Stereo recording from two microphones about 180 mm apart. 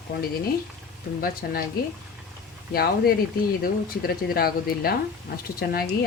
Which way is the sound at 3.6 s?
55° left (ahead or behind).